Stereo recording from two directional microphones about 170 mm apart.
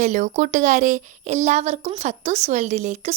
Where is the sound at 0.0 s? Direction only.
45° right (ahead or behind).